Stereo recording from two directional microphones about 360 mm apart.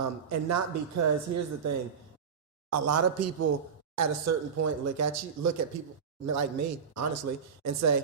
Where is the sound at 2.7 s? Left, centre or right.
Right.